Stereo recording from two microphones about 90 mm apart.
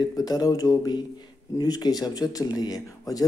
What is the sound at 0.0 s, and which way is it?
Speech, 45° left (ahead or behind).